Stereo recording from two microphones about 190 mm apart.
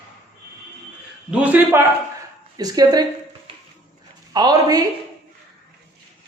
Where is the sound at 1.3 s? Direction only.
10° right (ahead or behind).